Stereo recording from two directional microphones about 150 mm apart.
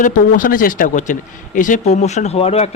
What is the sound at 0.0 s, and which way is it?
A man's voice, 60° left (ahead or behind).